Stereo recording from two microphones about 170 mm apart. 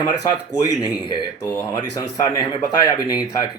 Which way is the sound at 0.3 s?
25° left (ahead or behind).